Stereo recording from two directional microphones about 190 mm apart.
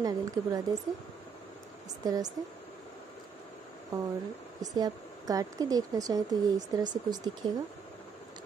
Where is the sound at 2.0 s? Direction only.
20° right (ahead or behind).